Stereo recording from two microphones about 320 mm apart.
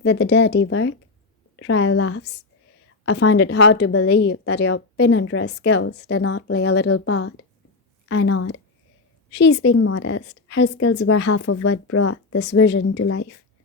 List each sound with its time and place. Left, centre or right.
0.0 s a woman's voice: left